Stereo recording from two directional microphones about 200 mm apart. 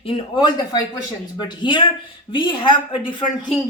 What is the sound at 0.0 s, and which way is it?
A woman's voice, 25° left (ahead or behind).